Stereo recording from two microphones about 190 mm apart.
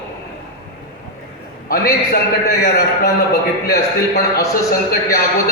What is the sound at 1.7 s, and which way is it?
A man's voice, 50° left (ahead or behind).